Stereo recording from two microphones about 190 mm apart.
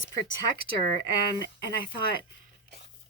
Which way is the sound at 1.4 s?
55° right (ahead or behind).